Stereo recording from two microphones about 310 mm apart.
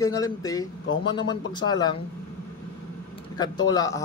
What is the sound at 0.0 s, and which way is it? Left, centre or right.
A man's voice, centre.